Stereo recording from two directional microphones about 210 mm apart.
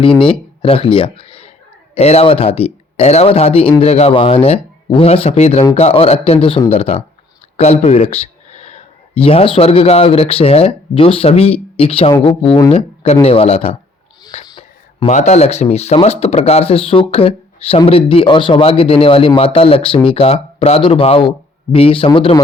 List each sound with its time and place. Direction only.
0.2 s speech: 25° left (ahead or behind)